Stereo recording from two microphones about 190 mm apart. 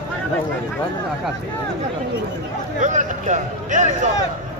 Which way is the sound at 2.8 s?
40° right (ahead or behind).